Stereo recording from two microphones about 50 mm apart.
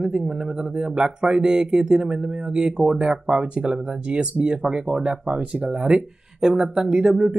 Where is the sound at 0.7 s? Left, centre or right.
Centre.